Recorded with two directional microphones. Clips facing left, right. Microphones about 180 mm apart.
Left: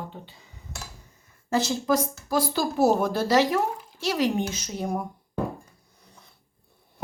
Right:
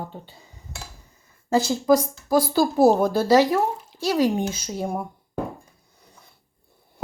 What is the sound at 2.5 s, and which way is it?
Speech, 35° right (ahead or behind).